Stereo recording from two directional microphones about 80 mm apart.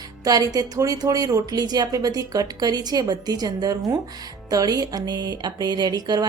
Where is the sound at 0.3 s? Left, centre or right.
Right.